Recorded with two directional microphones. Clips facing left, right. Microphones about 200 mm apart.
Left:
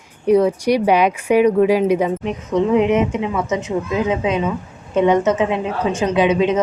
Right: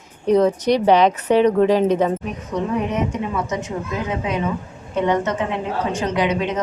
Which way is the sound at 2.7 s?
90° left.